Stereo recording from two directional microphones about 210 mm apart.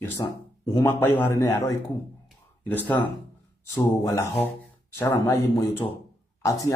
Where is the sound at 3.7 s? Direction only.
15° left (ahead or behind).